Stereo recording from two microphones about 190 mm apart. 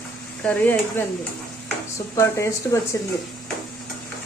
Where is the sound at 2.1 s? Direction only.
15° left (ahead or behind).